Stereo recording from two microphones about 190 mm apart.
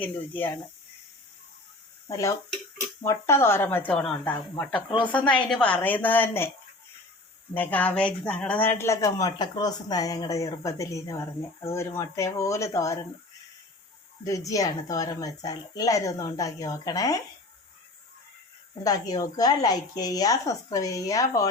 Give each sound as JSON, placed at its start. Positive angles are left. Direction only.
{"t": 0.0, "sound": "speech", "side_deg": 10}
{"t": 2.0, "sound": "speech", "side_deg": 15}
{"t": 4.5, "sound": "speech", "side_deg": 25}
{"t": 5.3, "sound": "speech", "side_deg": 5}
{"t": 7.5, "sound": "speech", "side_deg": 10}
{"t": 14.3, "sound": "speech", "side_deg": 15}
{"t": 18.8, "sound": "speech", "side_deg": 20}